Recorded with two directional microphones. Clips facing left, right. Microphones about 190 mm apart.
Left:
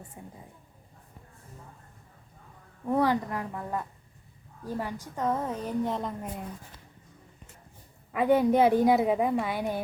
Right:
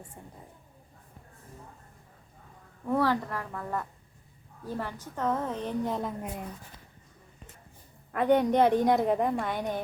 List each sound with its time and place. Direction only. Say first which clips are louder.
0.2 s a woman's voice: left 5 dB; 10° left (ahead or behind)
2.8 s a woman's voice: left 1 dB; 15° left (ahead or behind); by 6.4 s centre (ahead or behind)
8.1 s a woman's voice: left 1 dB; 5° left (ahead or behind)